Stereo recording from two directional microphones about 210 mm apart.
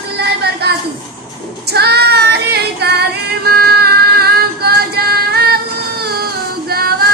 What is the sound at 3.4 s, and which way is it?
Female singing, 45° right (ahead or behind).